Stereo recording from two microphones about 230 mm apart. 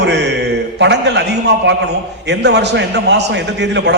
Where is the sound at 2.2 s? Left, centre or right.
Right.